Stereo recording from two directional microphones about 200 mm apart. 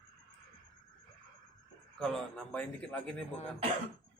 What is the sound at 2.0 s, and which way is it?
Speech, 5° left (ahead or behind).